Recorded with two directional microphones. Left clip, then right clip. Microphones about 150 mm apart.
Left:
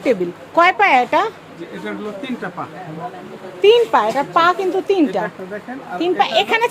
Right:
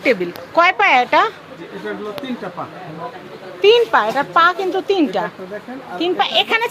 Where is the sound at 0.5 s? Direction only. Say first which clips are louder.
Even; 30° left (ahead or behind).